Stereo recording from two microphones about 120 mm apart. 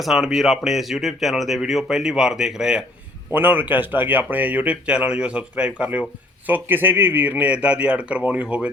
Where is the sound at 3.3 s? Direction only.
15° right (ahead or behind).